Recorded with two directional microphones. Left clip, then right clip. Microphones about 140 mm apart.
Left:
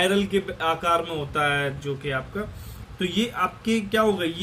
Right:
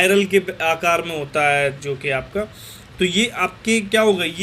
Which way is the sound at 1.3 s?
10° right (ahead or behind).